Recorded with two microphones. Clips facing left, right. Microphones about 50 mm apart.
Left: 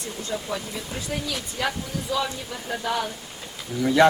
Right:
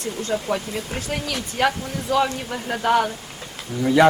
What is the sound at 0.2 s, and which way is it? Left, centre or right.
Speech, right.